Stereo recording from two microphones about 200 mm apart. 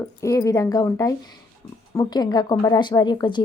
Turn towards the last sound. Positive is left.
turn(degrees=20)  # may be behind; listen again after turning